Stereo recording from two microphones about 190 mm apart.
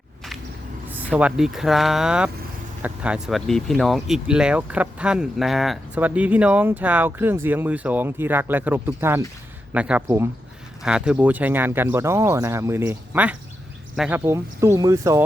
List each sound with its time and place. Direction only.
0.9 s speech: 5° right (ahead or behind)